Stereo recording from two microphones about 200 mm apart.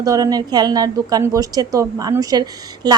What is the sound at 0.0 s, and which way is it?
A woman's voice, 20° right (ahead or behind).